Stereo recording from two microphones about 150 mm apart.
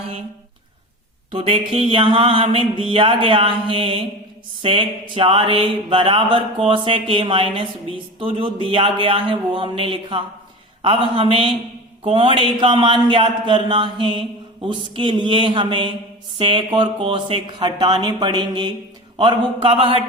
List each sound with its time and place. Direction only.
1.3 s speech: 40° right (ahead or behind)